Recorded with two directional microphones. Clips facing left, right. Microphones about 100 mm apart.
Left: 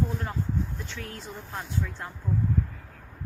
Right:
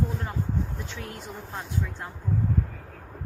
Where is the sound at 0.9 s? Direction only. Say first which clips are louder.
Right 1 dB; 20° right (ahead or behind).